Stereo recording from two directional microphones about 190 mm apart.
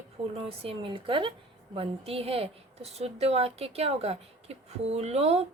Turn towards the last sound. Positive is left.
turn(degrees=-35)  # may be behind; listen again after turning